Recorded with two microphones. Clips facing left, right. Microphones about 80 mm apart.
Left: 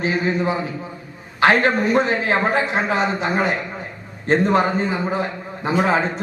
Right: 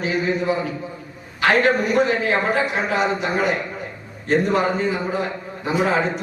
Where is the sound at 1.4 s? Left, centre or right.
Left.